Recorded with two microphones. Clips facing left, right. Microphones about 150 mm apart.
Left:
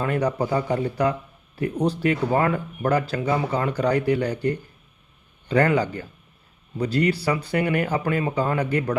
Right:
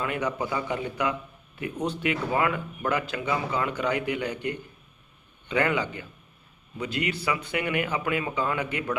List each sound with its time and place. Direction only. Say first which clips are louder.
0.0 s speech: left 5 dB; 35° left (ahead or behind)